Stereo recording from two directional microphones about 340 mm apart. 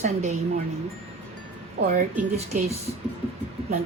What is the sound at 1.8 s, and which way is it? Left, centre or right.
Speech, right.